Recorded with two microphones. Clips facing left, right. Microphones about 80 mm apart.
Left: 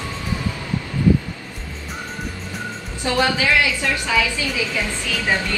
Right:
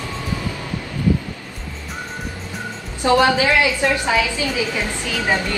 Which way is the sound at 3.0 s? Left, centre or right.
Right.